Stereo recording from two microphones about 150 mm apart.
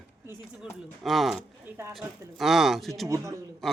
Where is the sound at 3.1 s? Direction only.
20° right (ahead or behind).